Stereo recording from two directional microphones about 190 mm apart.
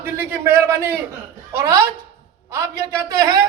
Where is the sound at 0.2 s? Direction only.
10° right (ahead or behind).